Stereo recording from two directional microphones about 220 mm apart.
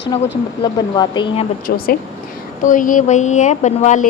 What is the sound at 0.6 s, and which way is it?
Speech, 20° left (ahead or behind).